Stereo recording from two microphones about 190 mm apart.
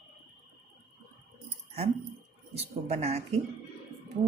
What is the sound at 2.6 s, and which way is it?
Speech, 35° right (ahead or behind).